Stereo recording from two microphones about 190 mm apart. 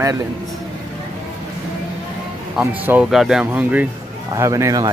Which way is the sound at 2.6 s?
10° right (ahead or behind).